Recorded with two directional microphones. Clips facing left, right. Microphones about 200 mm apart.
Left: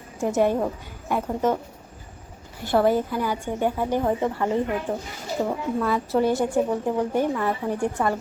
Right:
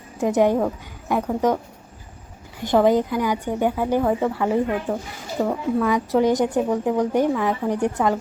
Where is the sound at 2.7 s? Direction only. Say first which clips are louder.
Right 3 dB; 15° right (ahead or behind).